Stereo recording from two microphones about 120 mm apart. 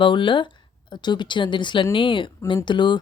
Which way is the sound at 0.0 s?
40° left (ahead or behind).